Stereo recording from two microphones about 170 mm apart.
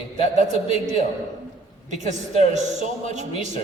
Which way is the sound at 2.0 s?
45° right (ahead or behind).